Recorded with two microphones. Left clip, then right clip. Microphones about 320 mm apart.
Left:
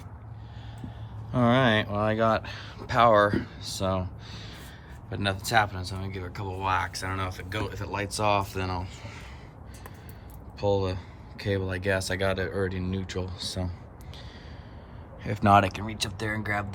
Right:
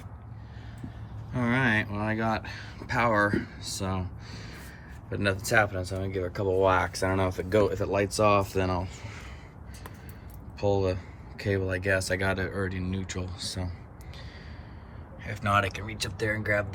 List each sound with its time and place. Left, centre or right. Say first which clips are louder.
1.3 s a sound: left 4 dB; centre
2.0 s speech: left 5 dB; centre
10.6 s speech: even; centre
15.2 s speech: left 5 dB; centre